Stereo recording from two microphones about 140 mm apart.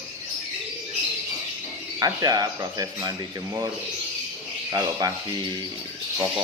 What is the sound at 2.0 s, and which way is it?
Speech, 25° right (ahead or behind).